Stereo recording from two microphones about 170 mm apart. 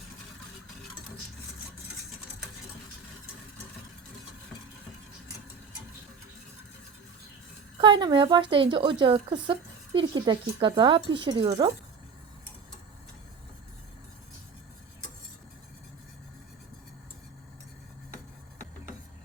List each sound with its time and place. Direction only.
7.8 s a woman's voice: 25° right (ahead or behind)